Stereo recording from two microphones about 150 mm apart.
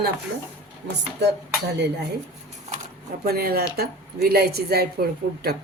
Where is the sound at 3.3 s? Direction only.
90° right.